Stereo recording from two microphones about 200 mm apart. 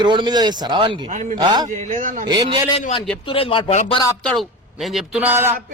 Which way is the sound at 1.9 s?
40° right (ahead or behind).